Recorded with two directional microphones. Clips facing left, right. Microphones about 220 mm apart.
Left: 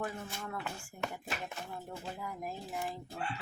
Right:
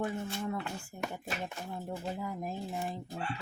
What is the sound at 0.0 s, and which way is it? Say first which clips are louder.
Speech: right 5 dB; 25° right (ahead or behind).